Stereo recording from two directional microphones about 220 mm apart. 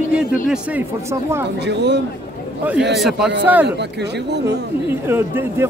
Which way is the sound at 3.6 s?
50° right (ahead or behind).